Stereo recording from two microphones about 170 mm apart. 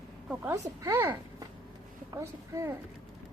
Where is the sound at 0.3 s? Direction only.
15° right (ahead or behind).